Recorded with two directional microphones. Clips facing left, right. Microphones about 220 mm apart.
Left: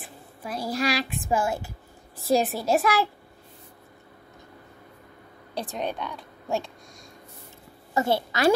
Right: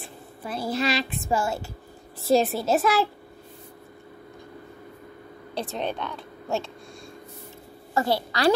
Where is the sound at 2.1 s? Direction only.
Centre (ahead or behind).